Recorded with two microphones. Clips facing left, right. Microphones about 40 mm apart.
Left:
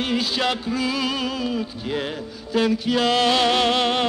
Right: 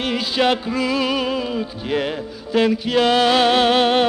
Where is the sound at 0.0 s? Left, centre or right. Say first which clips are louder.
Right 3 dB; right.